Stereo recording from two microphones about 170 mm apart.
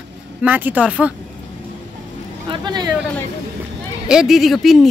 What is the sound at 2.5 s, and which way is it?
Speech, 25° right (ahead or behind).